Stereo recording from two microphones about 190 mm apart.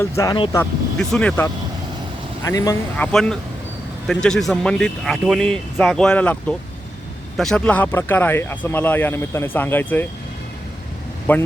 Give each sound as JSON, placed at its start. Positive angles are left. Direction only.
{"t": 0.2, "sound": "speech", "side_deg": 20}
{"t": 0.5, "sound": "speech", "side_deg": 5}
{"t": 2.4, "sound": "speech", "side_deg": 15}
{"t": 3.1, "sound": "speech", "side_deg": 5}
{"t": 11.3, "sound": "speech", "side_deg": 10}